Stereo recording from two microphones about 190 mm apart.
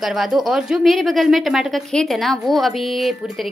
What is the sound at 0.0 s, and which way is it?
A woman's voice, centre (ahead or behind).